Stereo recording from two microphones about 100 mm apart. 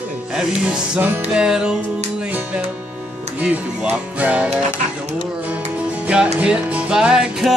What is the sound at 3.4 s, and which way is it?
Music, 15° right (ahead or behind).